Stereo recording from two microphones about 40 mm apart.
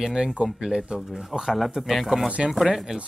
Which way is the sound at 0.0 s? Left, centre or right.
Centre.